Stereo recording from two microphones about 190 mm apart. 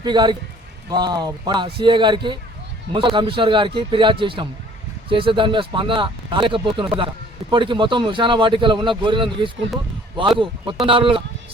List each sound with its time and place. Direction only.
0.0 s speech: 25° right (ahead or behind)